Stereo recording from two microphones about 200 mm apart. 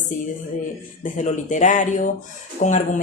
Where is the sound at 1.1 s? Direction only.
40° left (ahead or behind).